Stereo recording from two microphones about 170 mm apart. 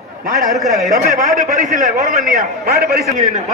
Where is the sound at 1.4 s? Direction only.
45° right (ahead or behind).